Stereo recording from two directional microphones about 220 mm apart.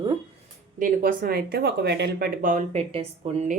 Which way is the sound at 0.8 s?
40° right (ahead or behind).